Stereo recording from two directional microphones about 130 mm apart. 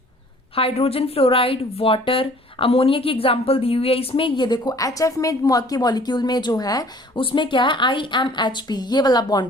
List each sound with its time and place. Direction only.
0.5 s a woman's voice: 50° left (ahead or behind); by 6.8 s 30° left (ahead or behind)
7.2 s a woman's voice: 40° left (ahead or behind)